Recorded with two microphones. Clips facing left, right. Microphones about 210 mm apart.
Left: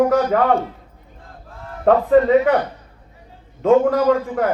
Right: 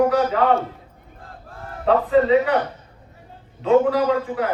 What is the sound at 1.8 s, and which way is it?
Speech, 50° left (ahead or behind).